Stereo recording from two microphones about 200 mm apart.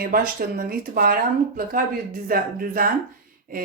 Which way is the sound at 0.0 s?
45° right (ahead or behind).